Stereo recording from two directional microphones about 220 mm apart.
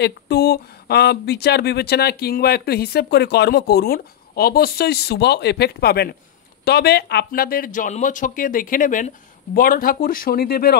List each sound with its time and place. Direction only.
0.0 s speech: 50° left (ahead or behind)